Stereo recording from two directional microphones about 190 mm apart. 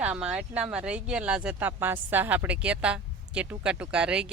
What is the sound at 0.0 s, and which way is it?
Speech, 5° right (ahead or behind).